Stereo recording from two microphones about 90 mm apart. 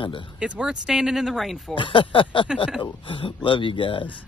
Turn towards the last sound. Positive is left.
turn(degrees=75)  # may be behind; listen again after turning